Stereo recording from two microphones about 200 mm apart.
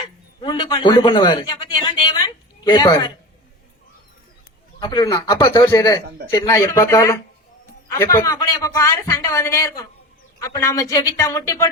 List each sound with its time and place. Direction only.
0.4 s a woman's voice: 20° left (ahead or behind)
4.8 s a man's voice: 20° left (ahead or behind)